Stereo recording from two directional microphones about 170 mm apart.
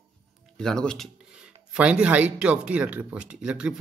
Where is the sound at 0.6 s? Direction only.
5° left (ahead or behind).